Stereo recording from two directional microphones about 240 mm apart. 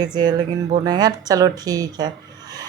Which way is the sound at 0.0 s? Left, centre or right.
Centre.